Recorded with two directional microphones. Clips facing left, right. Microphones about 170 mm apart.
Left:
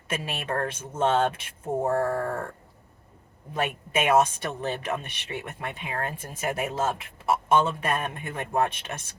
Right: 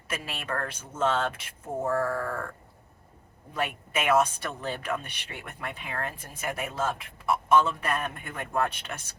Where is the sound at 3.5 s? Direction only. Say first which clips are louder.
Left 3 dB; 25° left (ahead or behind).